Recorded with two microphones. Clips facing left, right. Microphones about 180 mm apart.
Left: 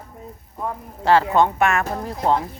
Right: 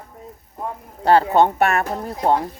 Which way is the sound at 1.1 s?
35° right (ahead or behind).